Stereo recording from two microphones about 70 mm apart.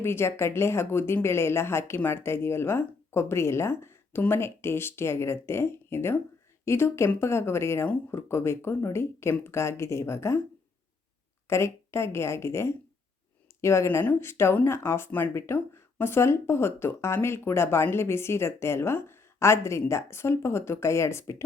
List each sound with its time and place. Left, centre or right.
0.0 s speech: left
11.4 s speech: left